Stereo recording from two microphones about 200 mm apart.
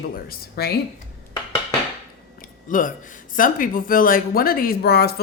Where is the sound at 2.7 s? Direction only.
40° left (ahead or behind).